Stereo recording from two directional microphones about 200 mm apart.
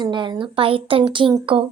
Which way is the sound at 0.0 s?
20° right (ahead or behind).